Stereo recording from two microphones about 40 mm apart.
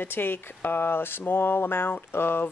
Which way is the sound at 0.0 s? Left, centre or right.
Left.